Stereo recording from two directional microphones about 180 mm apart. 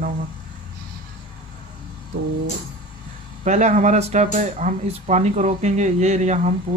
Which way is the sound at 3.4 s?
40° right (ahead or behind).